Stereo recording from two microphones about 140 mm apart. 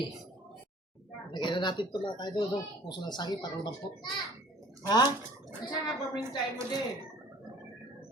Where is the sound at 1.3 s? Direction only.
35° left (ahead or behind).